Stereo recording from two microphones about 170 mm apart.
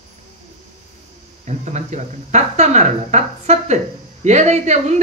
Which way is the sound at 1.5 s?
45° right (ahead or behind).